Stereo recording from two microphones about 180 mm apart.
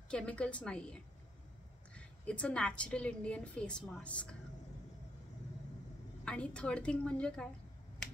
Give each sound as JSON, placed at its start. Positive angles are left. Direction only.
{"t": 0.1, "sound": "a woman's voice", "side_deg": 5}
{"t": 2.0, "sound": "a woman's voice", "side_deg": 5}
{"t": 6.2, "sound": "a woman's voice", "side_deg": 5}